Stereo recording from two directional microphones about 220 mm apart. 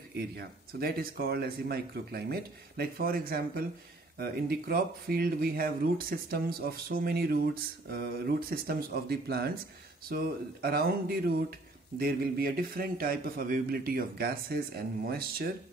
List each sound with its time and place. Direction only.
0.1 s speech: 45° right (ahead or behind)